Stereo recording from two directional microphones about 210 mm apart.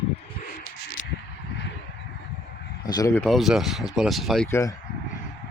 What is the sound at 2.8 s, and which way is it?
Speech, 20° left (ahead or behind).